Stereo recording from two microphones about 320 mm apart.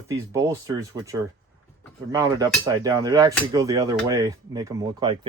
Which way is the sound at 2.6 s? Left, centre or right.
Centre.